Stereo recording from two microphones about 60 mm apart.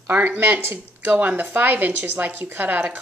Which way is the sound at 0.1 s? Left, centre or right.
Right.